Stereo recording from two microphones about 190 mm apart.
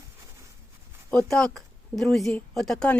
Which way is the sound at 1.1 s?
5° left (ahead or behind).